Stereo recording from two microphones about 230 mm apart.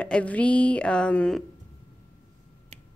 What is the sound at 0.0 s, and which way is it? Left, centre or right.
Speech, centre.